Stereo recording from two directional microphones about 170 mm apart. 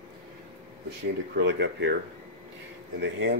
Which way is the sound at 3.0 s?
90° right.